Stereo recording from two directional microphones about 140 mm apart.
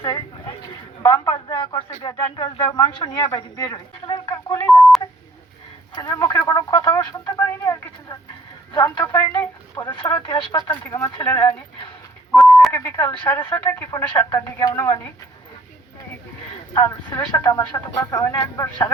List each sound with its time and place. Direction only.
0.0 s a sound: 30° left (ahead or behind)
1.0 s speech: 25° left (ahead or behind)
2.3 s speech: 35° left (ahead or behind)
4.8 s telephone dialing: centre (ahead or behind)
5.9 s speech: 25° left (ahead or behind)
9.9 s speech: 35° left (ahead or behind)
10.8 s speech: 20° left (ahead or behind)
12.7 s speech: 20° left (ahead or behind)
16.7 s speech: 20° left (ahead or behind)